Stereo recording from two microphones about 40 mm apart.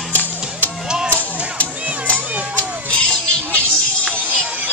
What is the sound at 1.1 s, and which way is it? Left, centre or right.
Music, left.